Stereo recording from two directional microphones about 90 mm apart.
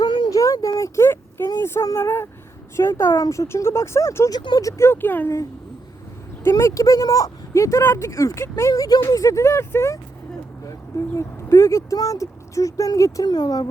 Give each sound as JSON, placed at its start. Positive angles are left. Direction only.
{"t": 0.0, "sound": "a sound", "side_deg": 55}
{"t": 0.3, "sound": "a sound", "side_deg": 40}
{"t": 1.5, "sound": "speech", "side_deg": 35}
{"t": 4.3, "sound": "speech", "side_deg": 50}
{"t": 4.6, "sound": "speech", "side_deg": 30}
{"t": 6.4, "sound": "speech", "side_deg": 35}